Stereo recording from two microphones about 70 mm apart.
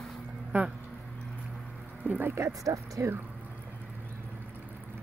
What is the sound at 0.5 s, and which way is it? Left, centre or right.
Speech, right.